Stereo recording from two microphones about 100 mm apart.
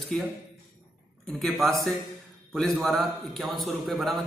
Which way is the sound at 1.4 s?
Centre (ahead or behind).